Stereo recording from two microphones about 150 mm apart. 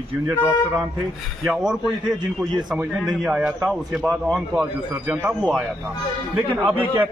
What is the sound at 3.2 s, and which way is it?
A man's voice, 5° right (ahead or behind).